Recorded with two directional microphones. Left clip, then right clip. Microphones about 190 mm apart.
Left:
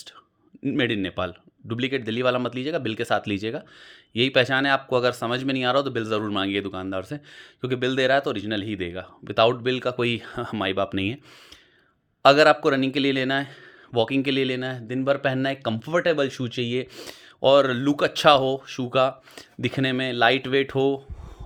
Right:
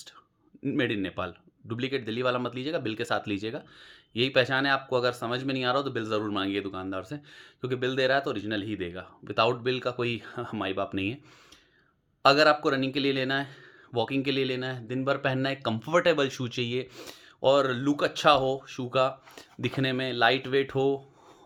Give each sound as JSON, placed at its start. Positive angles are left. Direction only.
{"t": 0.6, "sound": "speech", "side_deg": 25}
{"t": 12.2, "sound": "speech", "side_deg": 35}